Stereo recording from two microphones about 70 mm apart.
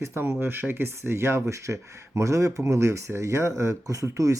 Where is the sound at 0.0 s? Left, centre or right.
Right.